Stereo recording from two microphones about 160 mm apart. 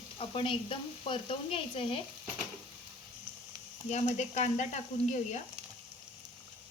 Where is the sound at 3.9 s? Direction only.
45° left (ahead or behind).